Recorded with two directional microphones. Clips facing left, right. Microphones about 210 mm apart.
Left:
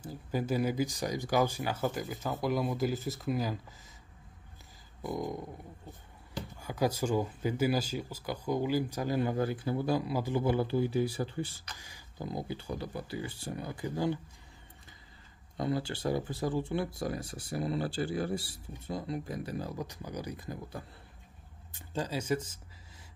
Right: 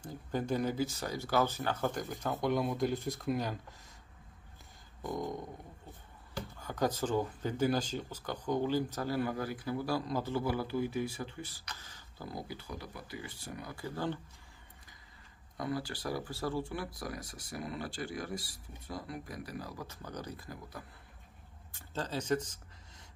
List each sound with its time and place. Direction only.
0.0 s speech: 5° left (ahead or behind)
5.0 s speech: 10° left (ahead or behind)
10.0 s speech: 10° left (ahead or behind)
10.4 s speech: 25° left (ahead or behind)
11.8 s speech: 15° left (ahead or behind)
15.5 s speech: 25° left (ahead or behind); by 22.6 s 10° left (ahead or behind)